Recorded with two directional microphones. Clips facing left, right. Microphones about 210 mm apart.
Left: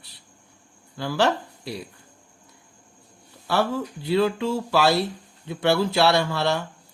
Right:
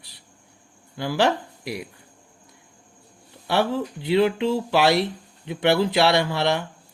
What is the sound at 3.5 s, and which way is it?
Speech, 20° right (ahead or behind).